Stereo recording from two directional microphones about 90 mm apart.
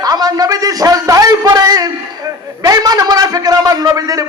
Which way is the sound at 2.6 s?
45° right (ahead or behind).